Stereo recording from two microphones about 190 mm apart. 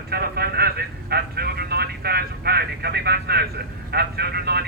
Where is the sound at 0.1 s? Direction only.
55° right (ahead or behind).